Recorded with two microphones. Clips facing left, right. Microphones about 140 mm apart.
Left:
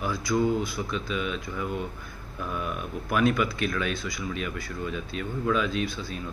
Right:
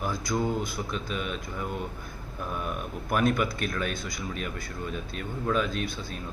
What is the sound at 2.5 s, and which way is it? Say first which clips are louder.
Speech: left 1 dB; 40° right (ahead or behind).